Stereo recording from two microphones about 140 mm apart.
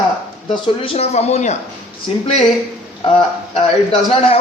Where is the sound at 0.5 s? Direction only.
40° left (ahead or behind).